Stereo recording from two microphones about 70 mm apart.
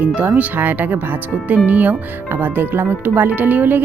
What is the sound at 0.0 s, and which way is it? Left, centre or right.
Speech, centre.